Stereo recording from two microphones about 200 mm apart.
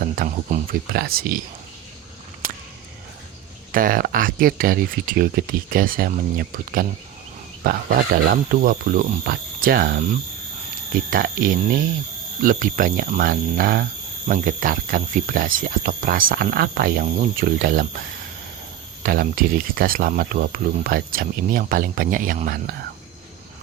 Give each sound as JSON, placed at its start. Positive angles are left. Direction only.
{"t": 0.2, "sound": "speech", "side_deg": -45}
{"t": 3.7, "sound": "speech", "side_deg": -45}
{"t": 19.0, "sound": "speech", "side_deg": -45}